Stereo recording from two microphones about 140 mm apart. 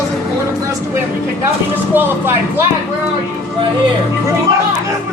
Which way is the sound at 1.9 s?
15° right (ahead or behind).